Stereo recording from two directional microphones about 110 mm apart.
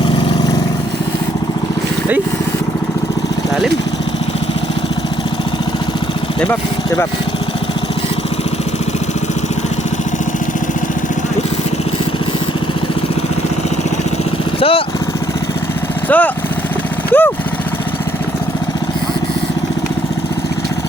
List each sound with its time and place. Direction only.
14.6 s vehicle: 55° left (ahead or behind)
16.0 s vehicle: 15° left (ahead or behind)